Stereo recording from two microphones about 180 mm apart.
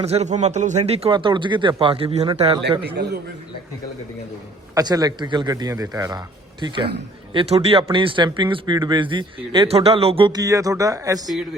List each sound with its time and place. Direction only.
0.0 s a man's voice: 35° right (ahead or behind)
2.8 s a man's voice: 60° right (ahead or behind)
4.7 s speech: 20° right (ahead or behind)